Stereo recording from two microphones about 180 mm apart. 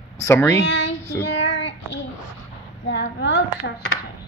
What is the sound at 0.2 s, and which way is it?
Speech, 15° left (ahead or behind).